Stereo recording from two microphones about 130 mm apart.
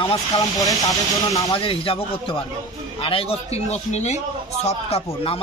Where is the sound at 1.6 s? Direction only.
45° left (ahead or behind).